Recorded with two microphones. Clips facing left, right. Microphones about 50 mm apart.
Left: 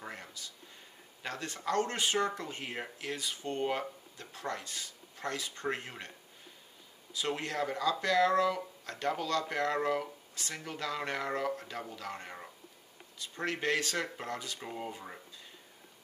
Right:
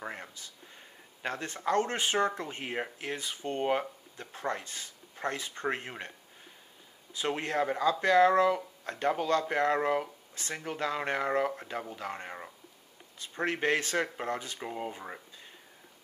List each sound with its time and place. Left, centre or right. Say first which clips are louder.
0.0 s speech: right 4 dB; right
7.2 s speech: right 4 dB; right
14.6 s speech: right 3 dB; centre